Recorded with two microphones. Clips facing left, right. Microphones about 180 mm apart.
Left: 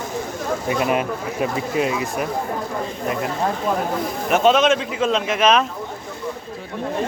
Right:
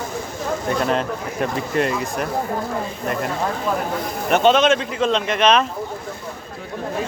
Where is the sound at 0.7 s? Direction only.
10° left (ahead or behind).